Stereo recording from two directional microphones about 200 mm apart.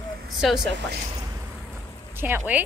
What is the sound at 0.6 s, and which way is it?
Speech, 60° right (ahead or behind).